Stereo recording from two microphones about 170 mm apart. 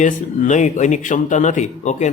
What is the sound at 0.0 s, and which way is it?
Speech, 45° left (ahead or behind).